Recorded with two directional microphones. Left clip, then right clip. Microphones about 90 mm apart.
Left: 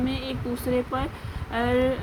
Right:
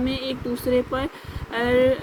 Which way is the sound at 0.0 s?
35° right (ahead or behind).